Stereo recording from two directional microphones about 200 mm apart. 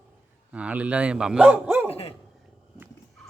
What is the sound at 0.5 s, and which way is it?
Speech, 5° right (ahead or behind).